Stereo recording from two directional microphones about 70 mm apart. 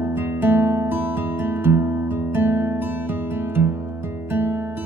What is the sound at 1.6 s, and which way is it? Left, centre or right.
Music, right.